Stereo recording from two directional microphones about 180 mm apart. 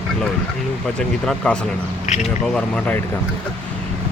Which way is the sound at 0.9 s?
5° left (ahead or behind).